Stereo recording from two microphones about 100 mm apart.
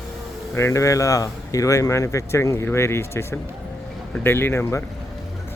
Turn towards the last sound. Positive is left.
turn(degrees=25)  # may be behind; listen again after turning